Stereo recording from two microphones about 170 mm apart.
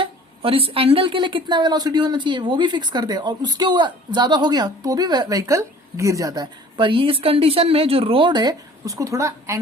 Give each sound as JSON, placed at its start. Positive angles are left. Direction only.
{"t": 0.0, "sound": "a woman's voice", "side_deg": -35}